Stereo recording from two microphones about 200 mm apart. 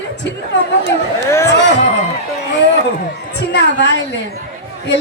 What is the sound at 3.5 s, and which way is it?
Speech, 65° left (ahead or behind).